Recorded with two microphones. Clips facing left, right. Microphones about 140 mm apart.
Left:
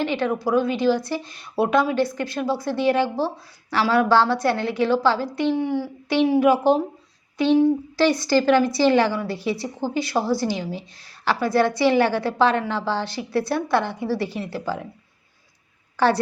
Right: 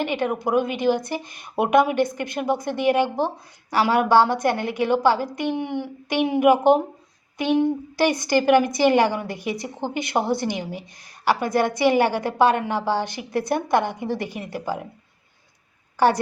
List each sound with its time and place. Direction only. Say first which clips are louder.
0.0 s a woman's voice: left 1 dB; 15° right (ahead or behind)
16.0 s a woman's voice: right 1 dB; 10° right (ahead or behind)